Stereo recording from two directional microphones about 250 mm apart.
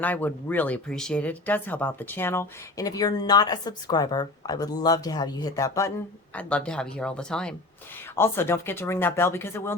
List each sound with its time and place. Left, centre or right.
0.0 s speech: centre